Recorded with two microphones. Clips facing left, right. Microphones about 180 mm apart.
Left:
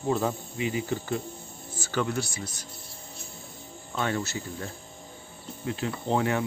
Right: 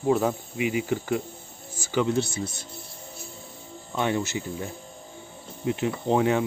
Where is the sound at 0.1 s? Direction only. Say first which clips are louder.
Right 4 dB; 10° right (ahead or behind); by 2.6 s 25° right (ahead or behind).